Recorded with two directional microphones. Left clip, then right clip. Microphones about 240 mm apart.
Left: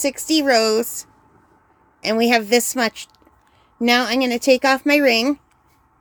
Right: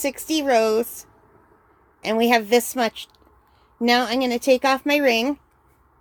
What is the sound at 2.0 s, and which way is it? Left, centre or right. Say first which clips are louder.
A woman's voice: left 2 dB; centre.